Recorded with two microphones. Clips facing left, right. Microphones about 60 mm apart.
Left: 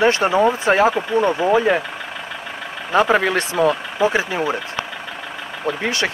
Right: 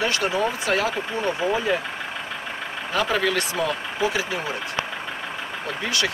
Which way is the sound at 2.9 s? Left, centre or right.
Left.